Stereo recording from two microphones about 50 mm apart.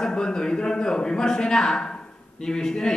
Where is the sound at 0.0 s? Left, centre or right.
Centre.